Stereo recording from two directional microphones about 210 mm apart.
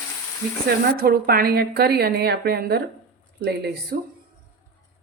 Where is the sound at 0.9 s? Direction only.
45° right (ahead or behind).